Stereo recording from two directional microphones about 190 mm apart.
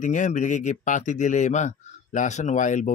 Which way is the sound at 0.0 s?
40° left (ahead or behind).